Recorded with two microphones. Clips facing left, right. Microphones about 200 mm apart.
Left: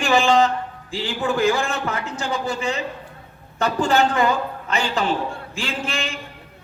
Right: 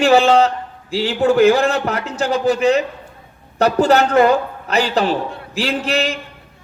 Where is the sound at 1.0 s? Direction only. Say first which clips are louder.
Right 8 dB; 70° right (ahead or behind).